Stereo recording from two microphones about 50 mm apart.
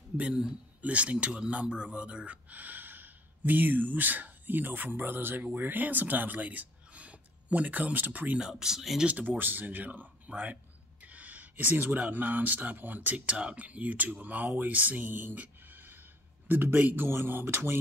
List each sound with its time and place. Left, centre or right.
0.2 s speech: centre
0.8 s speech: right
2.5 s speech: right
8.4 s speech: centre
9.0 s speech: right
9.4 s speech: right